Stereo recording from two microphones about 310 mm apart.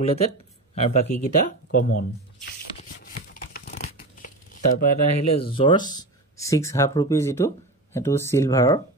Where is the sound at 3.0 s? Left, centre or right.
Left.